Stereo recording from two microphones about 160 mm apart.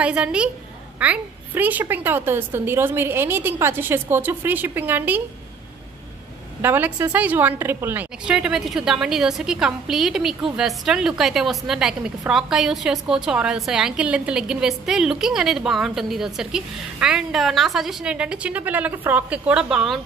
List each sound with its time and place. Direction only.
0.0 s a woman's voice: 5° right (ahead or behind)
6.6 s a woman's voice: 10° right (ahead or behind)